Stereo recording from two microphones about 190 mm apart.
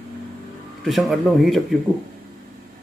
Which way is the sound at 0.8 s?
Centre (ahead or behind).